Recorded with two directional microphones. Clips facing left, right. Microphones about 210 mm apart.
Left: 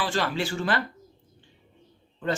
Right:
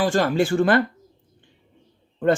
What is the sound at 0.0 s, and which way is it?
Speech, 45° right (ahead or behind).